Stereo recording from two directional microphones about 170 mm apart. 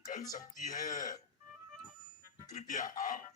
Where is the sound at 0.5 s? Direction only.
45° left (ahead or behind).